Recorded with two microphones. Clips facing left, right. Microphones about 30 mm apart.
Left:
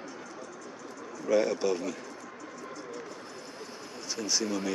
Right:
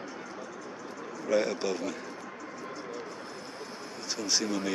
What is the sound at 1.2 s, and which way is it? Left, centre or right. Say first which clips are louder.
Speech: left 2 dB; centre.